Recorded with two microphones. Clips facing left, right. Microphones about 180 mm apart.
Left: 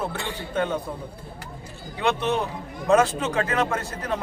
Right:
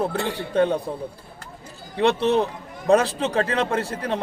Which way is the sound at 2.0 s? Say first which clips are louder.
Right 5 dB; 35° right (ahead or behind).